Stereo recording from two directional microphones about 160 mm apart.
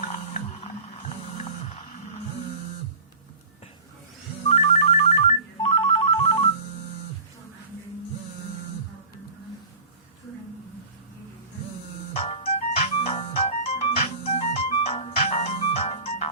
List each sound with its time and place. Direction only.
0.0 s music: 40° left (ahead or behind)
4.4 s ringtone: 45° left (ahead or behind)
12.1 s music: 40° left (ahead or behind)